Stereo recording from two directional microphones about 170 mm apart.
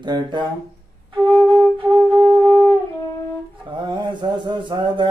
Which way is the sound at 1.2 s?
10° left (ahead or behind).